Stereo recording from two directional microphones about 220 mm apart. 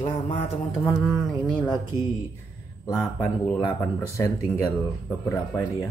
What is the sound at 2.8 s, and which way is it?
Speech, 10° left (ahead or behind).